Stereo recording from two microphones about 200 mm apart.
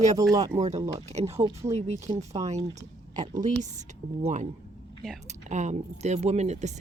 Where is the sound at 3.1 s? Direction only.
40° right (ahead or behind).